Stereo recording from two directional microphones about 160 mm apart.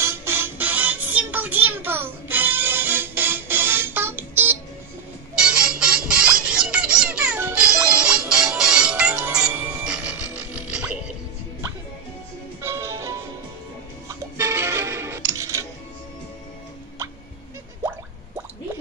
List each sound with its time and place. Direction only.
0.0 s music: 15° right (ahead or behind)
12.6 s music: 15° right (ahead or behind)